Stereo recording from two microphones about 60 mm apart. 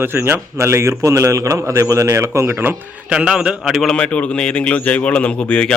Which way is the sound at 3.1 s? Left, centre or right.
Centre.